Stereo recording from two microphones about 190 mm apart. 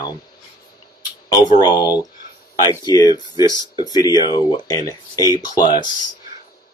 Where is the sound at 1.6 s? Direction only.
20° left (ahead or behind).